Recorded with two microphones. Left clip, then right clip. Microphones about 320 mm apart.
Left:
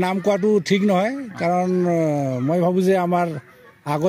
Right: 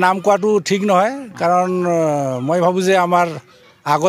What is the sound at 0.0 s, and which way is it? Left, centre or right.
A man's voice, right.